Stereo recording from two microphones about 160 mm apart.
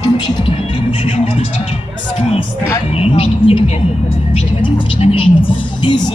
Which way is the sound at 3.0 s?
40° left (ahead or behind).